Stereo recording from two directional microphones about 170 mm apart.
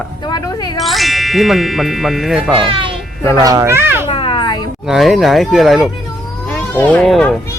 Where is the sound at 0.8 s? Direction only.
Centre (ahead or behind).